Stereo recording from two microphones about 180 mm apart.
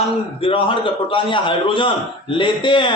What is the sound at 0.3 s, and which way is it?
A man's voice, 30° left (ahead or behind).